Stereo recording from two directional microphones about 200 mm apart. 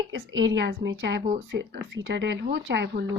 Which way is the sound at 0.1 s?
65° right (ahead or behind).